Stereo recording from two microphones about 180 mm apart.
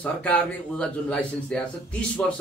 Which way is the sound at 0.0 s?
5° left (ahead or behind).